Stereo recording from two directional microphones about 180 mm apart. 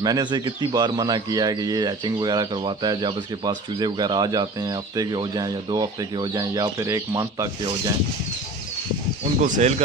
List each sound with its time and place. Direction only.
0.0 s speech: 25° right (ahead or behind)
9.4 s speech: 40° right (ahead or behind)